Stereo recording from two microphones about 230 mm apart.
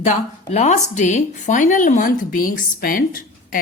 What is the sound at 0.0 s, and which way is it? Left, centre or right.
A woman's voice, left.